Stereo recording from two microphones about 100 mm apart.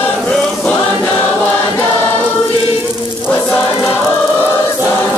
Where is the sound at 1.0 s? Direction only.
20° left (ahead or behind).